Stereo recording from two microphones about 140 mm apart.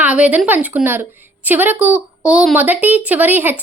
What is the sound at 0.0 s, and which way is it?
Speech, 10° right (ahead or behind).